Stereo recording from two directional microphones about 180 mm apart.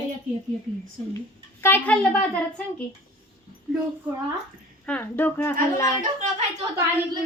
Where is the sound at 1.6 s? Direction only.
10° left (ahead or behind).